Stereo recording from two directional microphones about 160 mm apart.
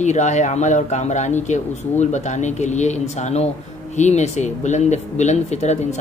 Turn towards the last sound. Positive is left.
turn(degrees=45)  # may be behind; listen again after turning